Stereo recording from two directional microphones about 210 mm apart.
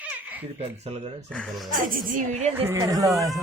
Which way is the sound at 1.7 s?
40° right (ahead or behind).